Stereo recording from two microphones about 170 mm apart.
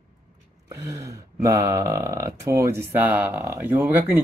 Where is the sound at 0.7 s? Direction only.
15° right (ahead or behind).